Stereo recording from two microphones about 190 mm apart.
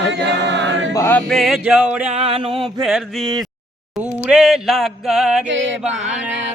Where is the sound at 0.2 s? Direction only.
70° right (ahead or behind).